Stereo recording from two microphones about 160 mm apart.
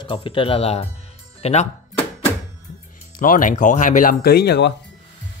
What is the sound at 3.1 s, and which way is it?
Speech, 60° left (ahead or behind).